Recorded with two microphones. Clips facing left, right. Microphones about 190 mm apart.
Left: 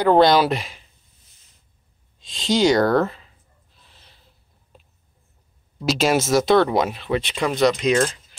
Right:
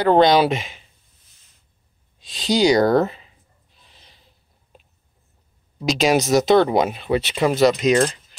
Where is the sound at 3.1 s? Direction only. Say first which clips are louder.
Even; 10° right (ahead or behind).